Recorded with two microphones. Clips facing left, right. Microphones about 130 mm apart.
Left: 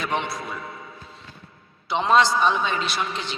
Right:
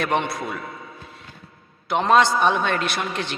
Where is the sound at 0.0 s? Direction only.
60° right (ahead or behind).